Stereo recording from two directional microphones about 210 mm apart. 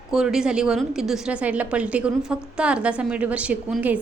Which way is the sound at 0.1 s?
5° right (ahead or behind).